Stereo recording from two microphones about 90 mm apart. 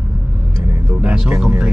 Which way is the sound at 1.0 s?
15° right (ahead or behind).